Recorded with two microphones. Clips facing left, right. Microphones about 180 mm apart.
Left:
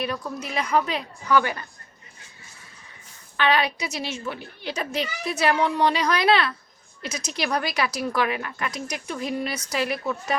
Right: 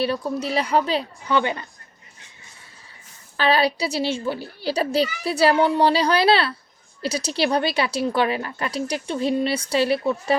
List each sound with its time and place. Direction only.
0.0 s a child's voice: 30° right (ahead or behind)
3.3 s a child's voice: 35° right (ahead or behind)